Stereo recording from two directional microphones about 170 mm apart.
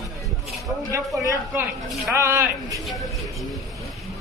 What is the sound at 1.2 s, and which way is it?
Speech, 20° right (ahead or behind).